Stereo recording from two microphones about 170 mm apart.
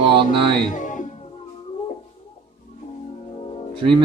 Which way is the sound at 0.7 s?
50° left (ahead or behind).